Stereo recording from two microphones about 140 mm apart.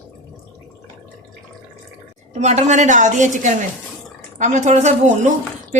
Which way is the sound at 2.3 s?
55° right (ahead or behind).